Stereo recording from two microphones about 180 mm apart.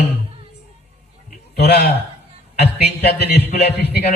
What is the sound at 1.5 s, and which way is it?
A woman's voice, 65° left (ahead or behind).